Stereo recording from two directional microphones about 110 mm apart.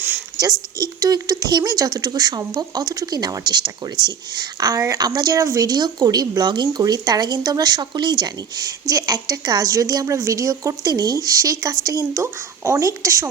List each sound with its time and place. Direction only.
0.8 s speech: 35° right (ahead or behind)